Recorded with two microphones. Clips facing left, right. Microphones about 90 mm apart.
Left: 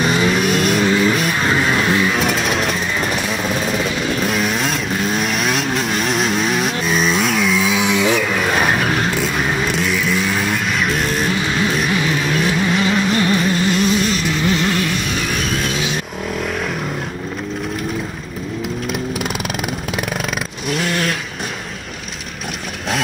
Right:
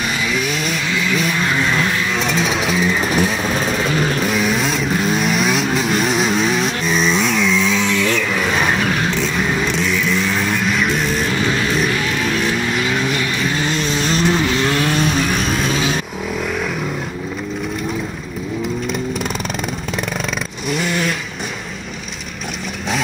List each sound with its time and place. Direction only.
0.2 s vehicle: 45° left (ahead or behind)
1.5 s vehicle: 15° left (ahead or behind)
2.1 s music: 5° left (ahead or behind)
3.2 s vehicle: 40° right (ahead or behind)
4.2 s vehicle: centre (ahead or behind)
13.7 s vehicle: 30° right (ahead or behind)
15.3 s vehicle: centre (ahead or behind)
15.7 s vehicle: 40° right (ahead or behind)
20.7 s a sound: centre (ahead or behind)